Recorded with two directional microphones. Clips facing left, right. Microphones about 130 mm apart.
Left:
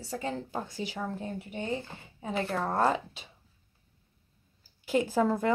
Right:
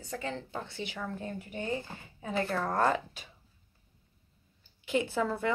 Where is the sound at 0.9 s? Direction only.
25° left (ahead or behind).